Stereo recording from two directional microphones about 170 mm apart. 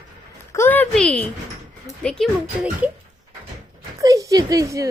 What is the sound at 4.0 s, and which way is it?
Speech, 20° right (ahead or behind).